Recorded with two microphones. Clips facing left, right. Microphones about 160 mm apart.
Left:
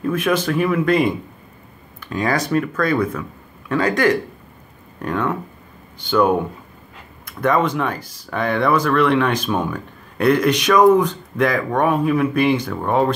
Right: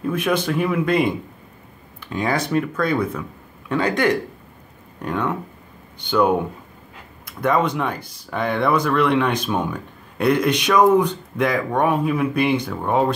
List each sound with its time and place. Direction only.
0.0 s speech: 15° right (ahead or behind)
2.0 s a sound: 10° right (ahead or behind)
2.2 s speech: 20° right (ahead or behind)
7.3 s speech: 15° right (ahead or behind)